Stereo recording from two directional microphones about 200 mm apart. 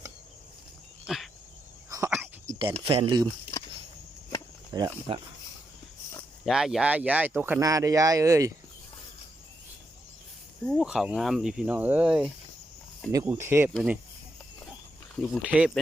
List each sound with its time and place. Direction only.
1.0 s a sound: centre (ahead or behind)
2.8 s speech: 25° right (ahead or behind)
4.7 s speech: 25° right (ahead or behind)
6.4 s speech: centre (ahead or behind)
10.7 s speech: 5° right (ahead or behind)
13.1 s speech: 15° right (ahead or behind)
15.1 s speech: centre (ahead or behind)